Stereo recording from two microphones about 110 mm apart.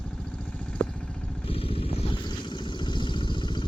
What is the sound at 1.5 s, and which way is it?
Vehicle, 60° left (ahead or behind).